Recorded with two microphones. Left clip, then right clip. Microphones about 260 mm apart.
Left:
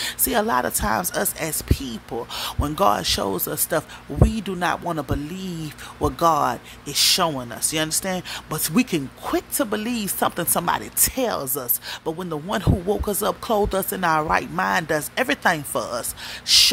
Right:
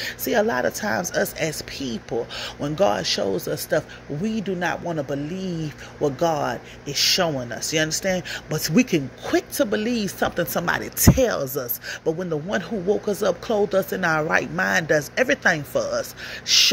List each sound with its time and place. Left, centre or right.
0.0 s speech: centre